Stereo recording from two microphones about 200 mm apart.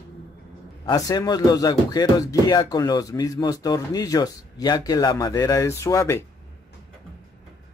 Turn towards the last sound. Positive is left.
turn(degrees=15)  # may be behind; listen again after turning